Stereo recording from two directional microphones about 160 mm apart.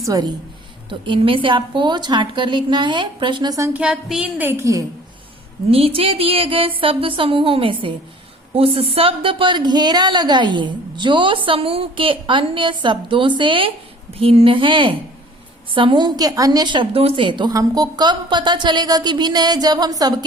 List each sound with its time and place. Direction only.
0.0 s a woman's voice: 25° right (ahead or behind)
3.7 s a woman's voice: 5° right (ahead or behind)
5.7 s a woman's voice: 35° right (ahead or behind)